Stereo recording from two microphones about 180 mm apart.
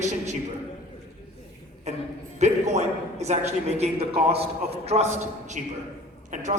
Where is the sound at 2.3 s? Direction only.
40° right (ahead or behind).